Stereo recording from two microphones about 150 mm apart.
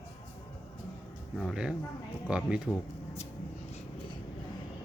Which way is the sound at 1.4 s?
Centre (ahead or behind).